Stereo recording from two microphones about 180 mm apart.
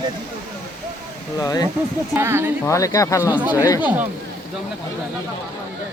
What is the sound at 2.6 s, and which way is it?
Speech, 20° left (ahead or behind).